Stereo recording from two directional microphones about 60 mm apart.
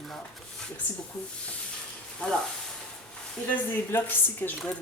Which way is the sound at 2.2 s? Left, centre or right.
Centre.